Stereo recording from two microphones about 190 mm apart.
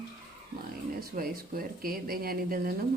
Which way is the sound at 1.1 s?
50° right (ahead or behind).